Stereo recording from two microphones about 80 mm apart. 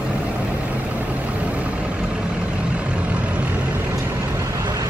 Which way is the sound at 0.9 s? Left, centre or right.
Centre.